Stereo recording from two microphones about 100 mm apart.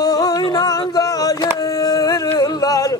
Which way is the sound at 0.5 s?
40° left (ahead or behind).